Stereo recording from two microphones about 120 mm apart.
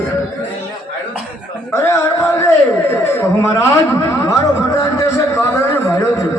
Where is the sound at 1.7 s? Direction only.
25° left (ahead or behind).